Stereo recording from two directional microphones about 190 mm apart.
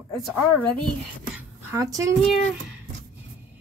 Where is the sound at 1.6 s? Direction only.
15° right (ahead or behind).